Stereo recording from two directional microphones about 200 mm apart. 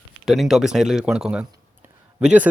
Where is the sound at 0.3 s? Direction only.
Centre (ahead or behind).